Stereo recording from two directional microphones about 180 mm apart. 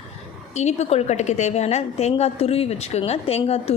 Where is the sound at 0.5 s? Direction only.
40° left (ahead or behind).